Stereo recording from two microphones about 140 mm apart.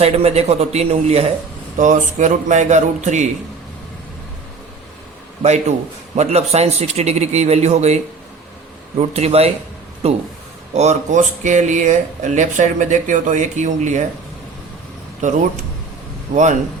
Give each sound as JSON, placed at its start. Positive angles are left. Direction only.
{"t": 0.0, "sound": "speech", "side_deg": -50}
{"t": 1.8, "sound": "speech", "side_deg": -60}
{"t": 5.4, "sound": "speech", "side_deg": -55}
{"t": 9.0, "sound": "speech", "side_deg": -45}
{"t": 15.2, "sound": "speech", "side_deg": -60}